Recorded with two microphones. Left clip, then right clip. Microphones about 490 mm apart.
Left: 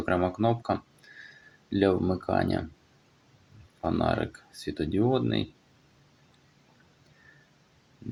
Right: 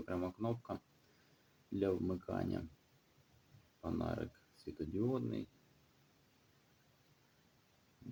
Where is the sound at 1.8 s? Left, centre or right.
Right.